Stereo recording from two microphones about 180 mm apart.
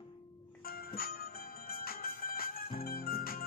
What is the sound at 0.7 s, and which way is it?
Music, 55° left (ahead or behind).